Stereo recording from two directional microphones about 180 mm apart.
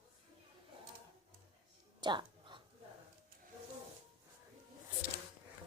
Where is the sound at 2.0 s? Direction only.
25° right (ahead or behind).